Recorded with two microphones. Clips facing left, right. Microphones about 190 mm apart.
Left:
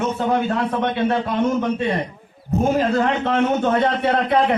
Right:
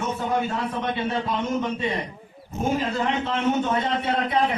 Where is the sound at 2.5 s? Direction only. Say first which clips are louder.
Left 7 dB; 60° left (ahead or behind).